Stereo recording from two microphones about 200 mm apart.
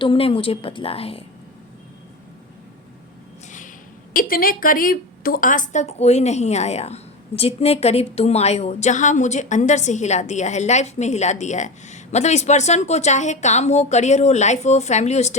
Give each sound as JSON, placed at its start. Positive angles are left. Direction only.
{"t": 0.0, "sound": "a woman's voice", "side_deg": 25}
{"t": 4.1, "sound": "a woman's voice", "side_deg": 45}